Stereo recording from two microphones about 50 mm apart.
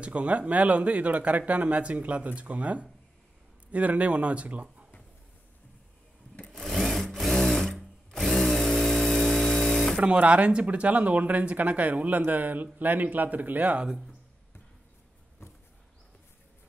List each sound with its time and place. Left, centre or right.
0.0 s speech: right
6.3 s sewing machine: centre
9.9 s speech: right